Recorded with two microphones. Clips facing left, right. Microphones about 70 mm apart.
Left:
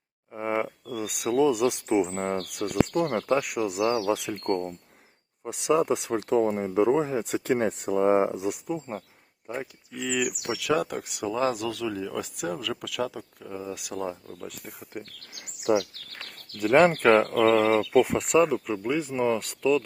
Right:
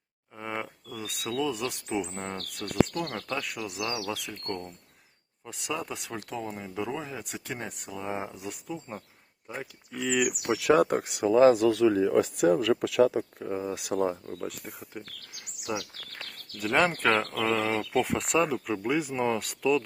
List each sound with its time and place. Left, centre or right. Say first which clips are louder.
0.3 s a sound: left 7 dB; left
0.9 s speech: left 6 dB; centre
2.3 s speech: left 7 dB; centre
4.1 s speech: left 8 dB; left
7.9 s speech: left 13 dB; left
8.3 s speech: left 8 dB; centre
9.5 s speech: left 4 dB; centre
10.5 s speech: right 5 dB; right
14.6 s speech: even; centre
15.7 s speech: left 10 dB; left
16.2 s bird: left 5 dB; left
16.6 s speech: left 6 dB; centre
17.5 s speech: left 5 dB; left
18.1 s speech: left 4 dB; centre